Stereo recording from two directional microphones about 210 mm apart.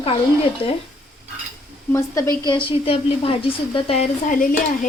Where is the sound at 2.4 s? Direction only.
20° left (ahead or behind).